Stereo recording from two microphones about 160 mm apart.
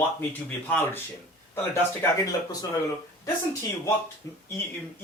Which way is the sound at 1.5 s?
20° left (ahead or behind).